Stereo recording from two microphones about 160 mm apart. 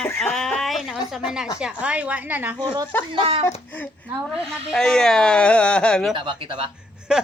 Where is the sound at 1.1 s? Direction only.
5° right (ahead or behind).